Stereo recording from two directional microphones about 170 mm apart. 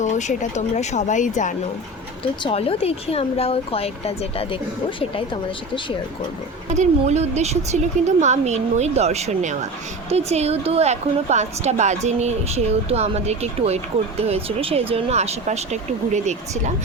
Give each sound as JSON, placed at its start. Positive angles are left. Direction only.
{"t": 0.0, "sound": "speech", "side_deg": 45}
{"t": 2.4, "sound": "speech", "side_deg": 35}
{"t": 6.7, "sound": "a woman's voice", "side_deg": -40}